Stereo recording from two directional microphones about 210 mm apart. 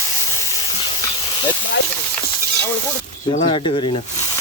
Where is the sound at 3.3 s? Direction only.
25° left (ahead or behind).